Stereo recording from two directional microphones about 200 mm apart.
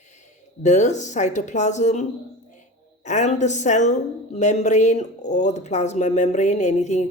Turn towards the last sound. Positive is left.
turn(degrees=35)  # may be behind; listen again after turning